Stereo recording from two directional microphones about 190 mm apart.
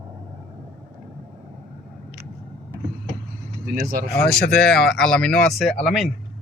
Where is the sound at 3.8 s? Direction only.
50° right (ahead or behind).